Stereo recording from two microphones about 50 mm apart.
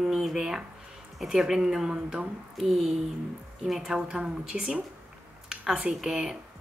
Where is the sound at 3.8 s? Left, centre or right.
Centre.